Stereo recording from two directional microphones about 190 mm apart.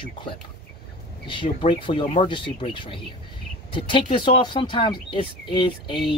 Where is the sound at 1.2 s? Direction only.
25° left (ahead or behind).